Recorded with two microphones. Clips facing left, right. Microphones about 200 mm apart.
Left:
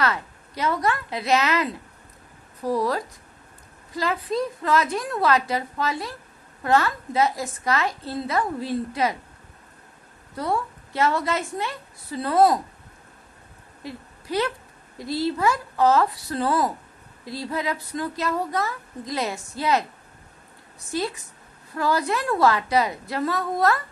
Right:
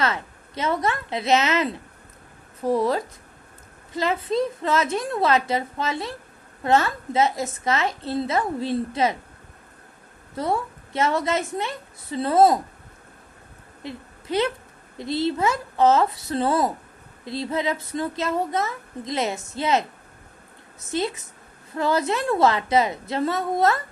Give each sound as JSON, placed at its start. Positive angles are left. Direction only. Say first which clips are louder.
{"t": 0.0, "sound": "a woman's voice", "louder": "even", "side_deg": -25}
{"t": 10.3, "sound": "a woman's voice", "louder": "right 1 dB", "side_deg": -25}
{"t": 13.8, "sound": "a woman's voice", "louder": "right 1 dB", "side_deg": -25}